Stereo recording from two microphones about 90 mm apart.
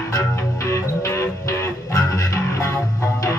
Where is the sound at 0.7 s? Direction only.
30° left (ahead or behind).